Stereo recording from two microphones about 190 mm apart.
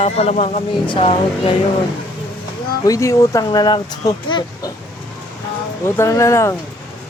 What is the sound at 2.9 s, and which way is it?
Speech, 15° left (ahead or behind).